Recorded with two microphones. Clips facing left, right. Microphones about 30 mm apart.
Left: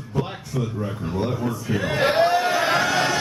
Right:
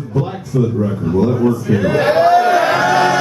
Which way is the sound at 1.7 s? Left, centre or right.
Centre.